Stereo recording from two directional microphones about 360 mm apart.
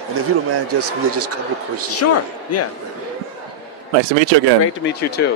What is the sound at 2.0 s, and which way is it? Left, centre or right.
Speech, left.